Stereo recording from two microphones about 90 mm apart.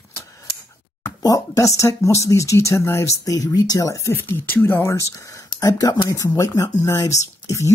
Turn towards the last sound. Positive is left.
turn(degrees=35)  # may be behind; listen again after turning